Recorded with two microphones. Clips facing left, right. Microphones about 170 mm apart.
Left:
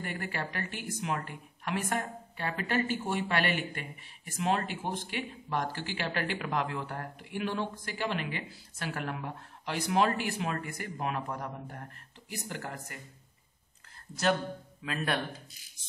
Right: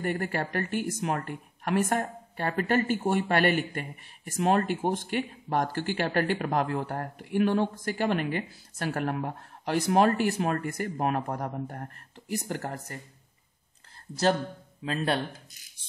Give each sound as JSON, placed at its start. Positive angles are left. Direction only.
{"t": 0.0, "sound": "a woman's voice", "side_deg": -45}
{"t": 14.8, "sound": "speech", "side_deg": -30}